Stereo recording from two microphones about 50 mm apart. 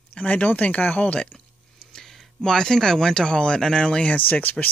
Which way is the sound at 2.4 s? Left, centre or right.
Centre.